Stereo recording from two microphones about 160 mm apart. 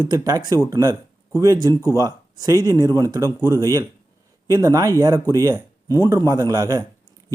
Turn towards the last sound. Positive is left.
turn(degrees=-25)  # may be behind; listen again after turning